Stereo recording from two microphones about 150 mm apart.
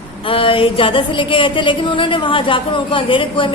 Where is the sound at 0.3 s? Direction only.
35° left (ahead or behind).